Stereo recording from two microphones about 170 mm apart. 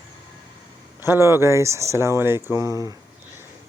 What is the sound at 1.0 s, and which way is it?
Speech, 15° right (ahead or behind).